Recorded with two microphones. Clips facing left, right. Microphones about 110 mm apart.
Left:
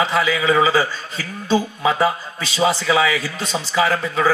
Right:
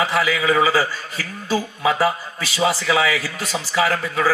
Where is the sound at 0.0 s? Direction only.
25° left (ahead or behind).